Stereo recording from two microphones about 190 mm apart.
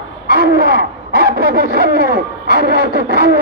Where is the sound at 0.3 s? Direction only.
55° right (ahead or behind).